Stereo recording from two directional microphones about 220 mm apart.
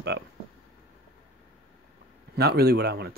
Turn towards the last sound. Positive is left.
turn(degrees=-50)  # may be behind; listen again after turning